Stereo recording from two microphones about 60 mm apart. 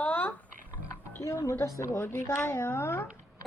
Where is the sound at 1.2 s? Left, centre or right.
Left.